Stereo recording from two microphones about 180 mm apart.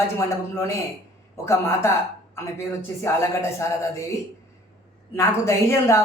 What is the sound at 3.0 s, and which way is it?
Speech, 15° left (ahead or behind).